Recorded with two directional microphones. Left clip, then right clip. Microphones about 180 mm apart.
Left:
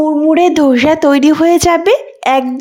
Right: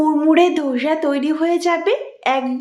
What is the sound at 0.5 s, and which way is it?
A woman's voice, 55° left (ahead or behind).